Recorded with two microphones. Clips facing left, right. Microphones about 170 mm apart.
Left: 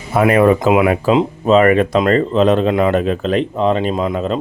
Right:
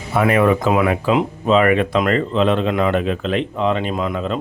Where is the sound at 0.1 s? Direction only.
40° left (ahead or behind).